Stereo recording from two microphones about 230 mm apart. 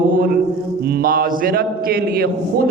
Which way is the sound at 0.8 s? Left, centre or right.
Right.